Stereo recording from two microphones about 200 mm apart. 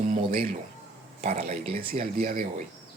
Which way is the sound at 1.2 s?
30° right (ahead or behind).